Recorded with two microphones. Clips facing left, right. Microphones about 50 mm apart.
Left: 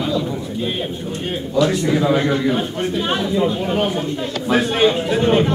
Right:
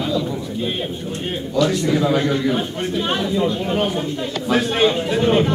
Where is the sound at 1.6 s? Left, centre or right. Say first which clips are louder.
Left 1 dB; centre.